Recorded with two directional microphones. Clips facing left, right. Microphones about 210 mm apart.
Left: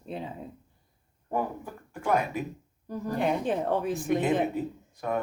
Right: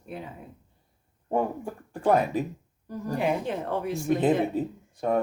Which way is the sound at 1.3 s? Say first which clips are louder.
Right 4 dB; 25° right (ahead or behind).